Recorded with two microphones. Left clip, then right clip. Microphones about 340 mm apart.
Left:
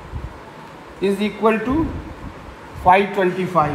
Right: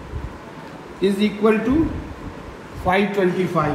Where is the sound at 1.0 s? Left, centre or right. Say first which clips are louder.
Left 1 dB; left.